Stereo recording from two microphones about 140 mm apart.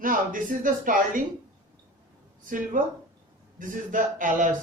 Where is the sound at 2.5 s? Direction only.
70° right (ahead or behind).